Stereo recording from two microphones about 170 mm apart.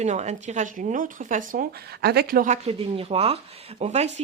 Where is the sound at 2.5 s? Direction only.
35° right (ahead or behind).